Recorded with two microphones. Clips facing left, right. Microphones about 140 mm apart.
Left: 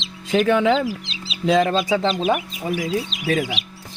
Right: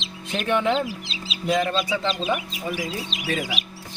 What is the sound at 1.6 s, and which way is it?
Speech, 75° left (ahead or behind).